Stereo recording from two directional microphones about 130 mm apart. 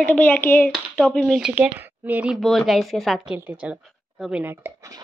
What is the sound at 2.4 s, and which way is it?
A woman's voice, centre (ahead or behind).